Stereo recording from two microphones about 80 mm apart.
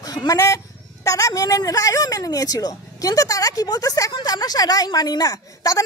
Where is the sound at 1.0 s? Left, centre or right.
Left.